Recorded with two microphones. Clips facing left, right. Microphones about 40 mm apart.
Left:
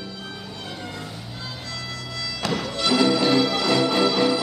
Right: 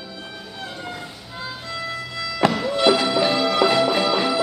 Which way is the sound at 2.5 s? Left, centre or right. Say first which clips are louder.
Right 6 dB; centre.